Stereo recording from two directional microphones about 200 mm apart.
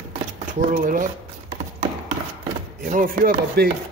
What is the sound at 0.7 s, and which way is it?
Chopping, 45° right (ahead or behind).